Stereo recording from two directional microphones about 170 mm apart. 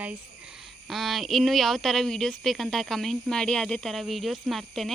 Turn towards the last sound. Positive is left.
turn(degrees=0)  # may be behind; listen again after turning